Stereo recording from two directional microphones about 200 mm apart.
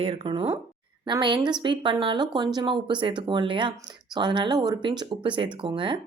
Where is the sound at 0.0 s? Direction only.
25° right (ahead or behind).